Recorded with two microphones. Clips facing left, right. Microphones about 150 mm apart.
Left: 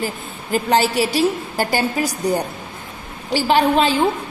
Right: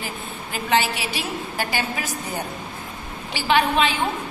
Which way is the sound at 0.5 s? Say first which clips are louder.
Left 5 dB; 40° left (ahead or behind).